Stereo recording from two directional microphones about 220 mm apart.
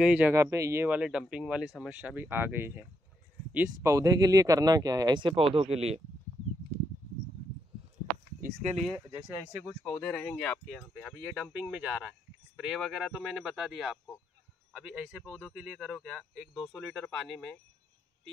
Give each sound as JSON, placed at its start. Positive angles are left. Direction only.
{"t": 0.0, "sound": "speech", "side_deg": -5}
{"t": 8.4, "sound": "speech", "side_deg": -35}
{"t": 9.4, "sound": "speech", "side_deg": 5}